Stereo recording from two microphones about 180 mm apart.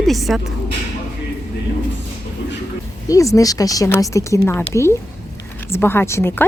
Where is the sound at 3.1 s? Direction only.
15° left (ahead or behind).